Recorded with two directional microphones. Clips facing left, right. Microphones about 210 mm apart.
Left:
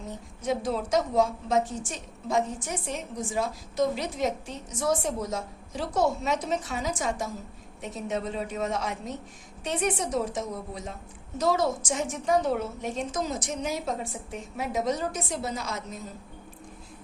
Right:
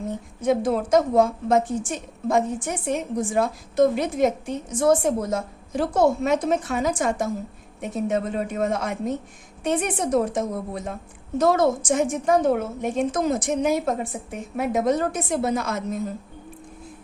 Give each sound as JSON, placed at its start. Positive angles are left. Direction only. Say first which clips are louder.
{"t": 0.4, "sound": "a woman's voice", "louder": "right 7 dB", "side_deg": -55}